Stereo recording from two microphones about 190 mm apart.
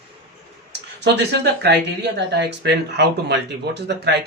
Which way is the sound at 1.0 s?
60° right (ahead or behind).